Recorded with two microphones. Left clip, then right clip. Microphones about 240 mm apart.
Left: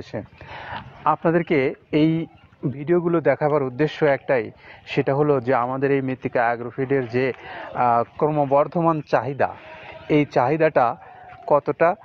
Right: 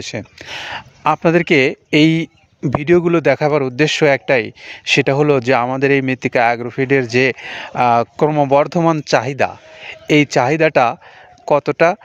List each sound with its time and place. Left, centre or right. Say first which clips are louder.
0.0 s speech: right 6 dB; right